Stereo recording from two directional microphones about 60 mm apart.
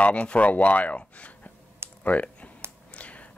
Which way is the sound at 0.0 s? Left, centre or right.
Left.